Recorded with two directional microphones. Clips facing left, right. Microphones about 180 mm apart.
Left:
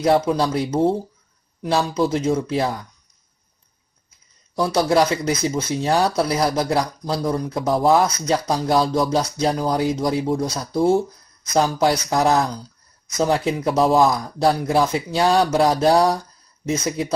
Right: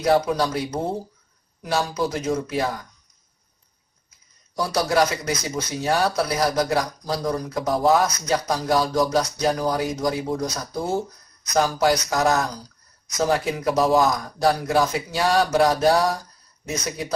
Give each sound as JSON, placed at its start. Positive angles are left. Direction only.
{"t": 0.0, "sound": "speech", "side_deg": 25}
{"t": 4.6, "sound": "speech", "side_deg": 25}